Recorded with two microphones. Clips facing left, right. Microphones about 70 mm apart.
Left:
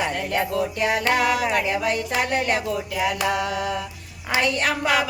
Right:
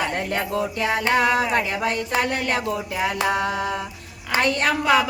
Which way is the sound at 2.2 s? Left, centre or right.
Left.